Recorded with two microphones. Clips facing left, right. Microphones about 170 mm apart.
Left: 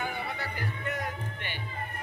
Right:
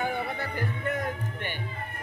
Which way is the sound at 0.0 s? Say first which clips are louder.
Right 4 dB; 50° right (ahead or behind).